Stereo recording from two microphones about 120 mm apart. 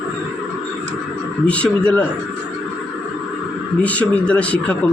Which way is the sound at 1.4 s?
10° left (ahead or behind).